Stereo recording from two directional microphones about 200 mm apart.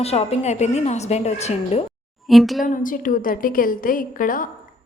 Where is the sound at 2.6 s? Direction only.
40° left (ahead or behind).